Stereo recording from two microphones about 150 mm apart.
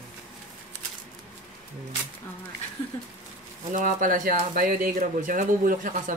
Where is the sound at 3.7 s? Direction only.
60° right (ahead or behind).